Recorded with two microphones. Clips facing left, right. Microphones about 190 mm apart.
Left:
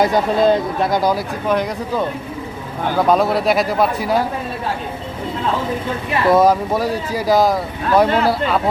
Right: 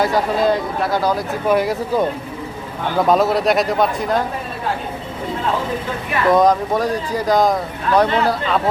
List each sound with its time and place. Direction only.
0.0 s speech: 20° left (ahead or behind)
1.5 s speech: 10° right (ahead or behind)
3.1 s speech: centre (ahead or behind)
6.3 s speech: 5° left (ahead or behind)